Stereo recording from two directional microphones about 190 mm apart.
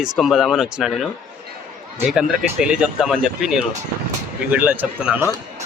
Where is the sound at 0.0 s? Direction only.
Centre (ahead or behind).